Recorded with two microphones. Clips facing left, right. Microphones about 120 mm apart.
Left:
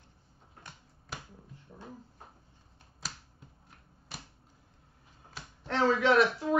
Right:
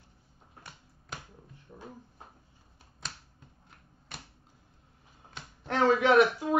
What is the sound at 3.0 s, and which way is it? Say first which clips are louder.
Finger snapping: even; 5° left (ahead or behind).